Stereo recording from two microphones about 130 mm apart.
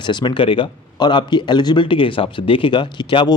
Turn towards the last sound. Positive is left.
turn(degrees=40)  # may be behind; listen again after turning